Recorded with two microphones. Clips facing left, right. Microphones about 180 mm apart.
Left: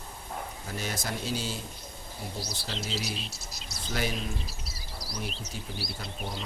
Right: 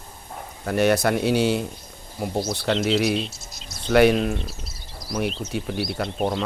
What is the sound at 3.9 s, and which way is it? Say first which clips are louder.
Speech: right 16 dB; 70° right (ahead or behind).